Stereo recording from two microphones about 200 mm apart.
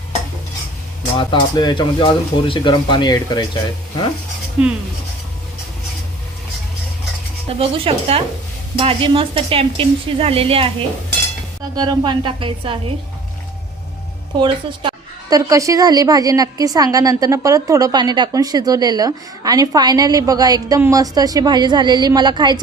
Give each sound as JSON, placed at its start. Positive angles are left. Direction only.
{"t": 1.1, "sound": "speech", "side_deg": 25}
{"t": 4.6, "sound": "speech", "side_deg": -5}
{"t": 7.6, "sound": "a woman's voice", "side_deg": -30}
{"t": 11.8, "sound": "a woman's voice", "side_deg": -20}
{"t": 14.3, "sound": "a woman's voice", "side_deg": -25}